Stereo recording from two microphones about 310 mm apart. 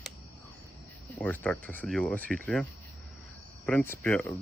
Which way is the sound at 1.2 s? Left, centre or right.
Centre.